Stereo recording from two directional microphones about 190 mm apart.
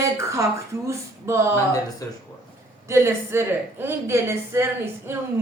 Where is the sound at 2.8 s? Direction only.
15° right (ahead or behind).